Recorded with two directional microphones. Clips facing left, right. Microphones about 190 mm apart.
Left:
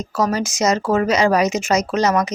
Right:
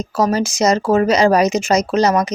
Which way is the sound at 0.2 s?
30° right (ahead or behind).